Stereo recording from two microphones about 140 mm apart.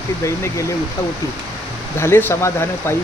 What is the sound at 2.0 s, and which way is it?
Speech, 15° left (ahead or behind).